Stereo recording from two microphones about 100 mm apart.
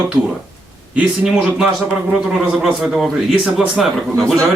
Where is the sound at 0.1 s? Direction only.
10° right (ahead or behind).